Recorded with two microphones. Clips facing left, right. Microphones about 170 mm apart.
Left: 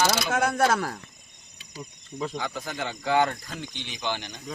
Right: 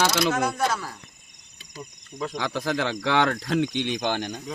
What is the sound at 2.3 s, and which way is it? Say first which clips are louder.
Speech: right 6 dB; 90° right.